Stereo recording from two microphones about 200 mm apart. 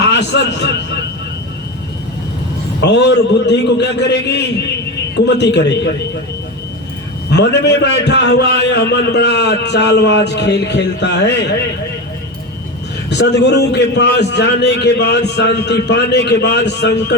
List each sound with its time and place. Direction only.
0.0 s a man's voice: 60° left (ahead or behind)
2.8 s a man's voice: 60° left (ahead or behind)
7.3 s a man's voice: 60° left (ahead or behind)
13.1 s a man's voice: 60° left (ahead or behind)